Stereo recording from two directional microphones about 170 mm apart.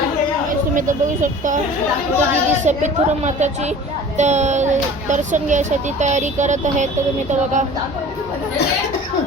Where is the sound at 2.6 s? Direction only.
45° right (ahead or behind).